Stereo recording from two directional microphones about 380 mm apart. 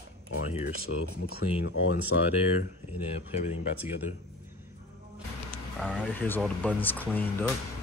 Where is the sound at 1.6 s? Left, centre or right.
Left.